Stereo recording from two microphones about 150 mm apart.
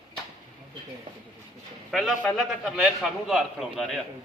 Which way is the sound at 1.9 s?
Centre (ahead or behind).